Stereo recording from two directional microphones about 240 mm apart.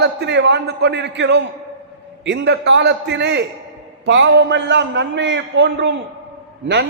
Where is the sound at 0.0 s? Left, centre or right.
Right.